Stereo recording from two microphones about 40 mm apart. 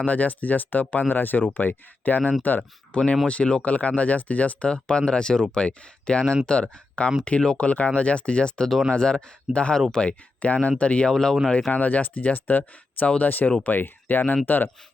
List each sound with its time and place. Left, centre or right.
0.0 s speech: left
2.9 s speech: left
4.7 s speech: left